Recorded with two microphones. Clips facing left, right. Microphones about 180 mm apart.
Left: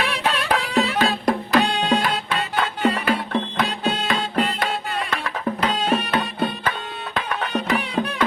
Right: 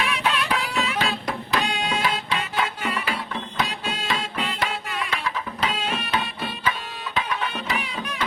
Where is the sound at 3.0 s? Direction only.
65° left (ahead or behind).